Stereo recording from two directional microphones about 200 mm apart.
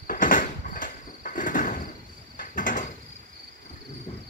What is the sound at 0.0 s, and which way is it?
Cricket, 45° left (ahead or behind).